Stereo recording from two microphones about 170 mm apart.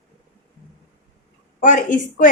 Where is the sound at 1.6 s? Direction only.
50° left (ahead or behind).